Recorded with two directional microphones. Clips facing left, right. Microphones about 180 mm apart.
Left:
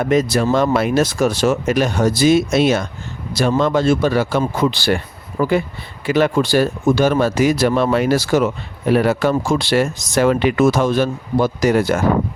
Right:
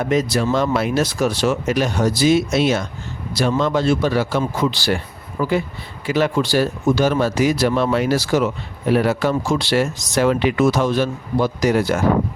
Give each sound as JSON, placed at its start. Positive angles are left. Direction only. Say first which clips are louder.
{"t": 0.1, "sound": "speech", "louder": "left 3 dB", "side_deg": 50}